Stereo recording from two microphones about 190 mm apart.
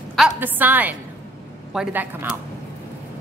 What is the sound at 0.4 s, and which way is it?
A woman's voice, 10° right (ahead or behind).